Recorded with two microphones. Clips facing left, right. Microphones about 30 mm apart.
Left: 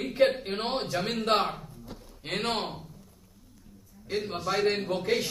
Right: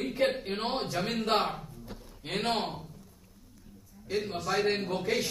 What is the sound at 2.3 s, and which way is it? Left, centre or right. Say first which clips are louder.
Speech: even; centre.